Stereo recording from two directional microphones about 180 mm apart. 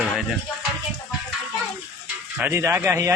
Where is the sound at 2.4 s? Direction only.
15° right (ahead or behind).